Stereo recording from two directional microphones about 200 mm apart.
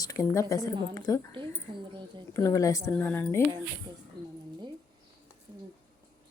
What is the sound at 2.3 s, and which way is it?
Speech, 15° left (ahead or behind).